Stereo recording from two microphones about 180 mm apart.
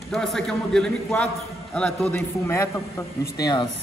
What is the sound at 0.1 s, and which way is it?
A man's voice, centre (ahead or behind).